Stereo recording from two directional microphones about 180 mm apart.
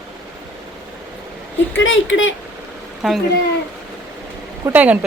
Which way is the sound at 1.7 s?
90° left.